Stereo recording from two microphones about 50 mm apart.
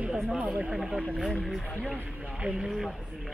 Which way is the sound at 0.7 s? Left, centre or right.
Centre.